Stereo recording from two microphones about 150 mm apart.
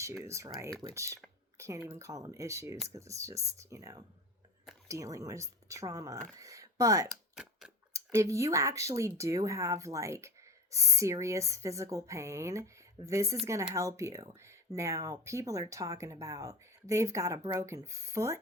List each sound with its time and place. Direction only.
0.0 s speech: 20° right (ahead or behind)
7.1 s a sound: centre (ahead or behind)
7.9 s speech: 20° right (ahead or behind)